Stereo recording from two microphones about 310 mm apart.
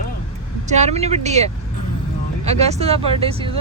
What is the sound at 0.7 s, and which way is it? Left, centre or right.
Speech, right.